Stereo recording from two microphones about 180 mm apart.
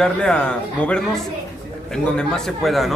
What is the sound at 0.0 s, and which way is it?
Speech, 5° left (ahead or behind).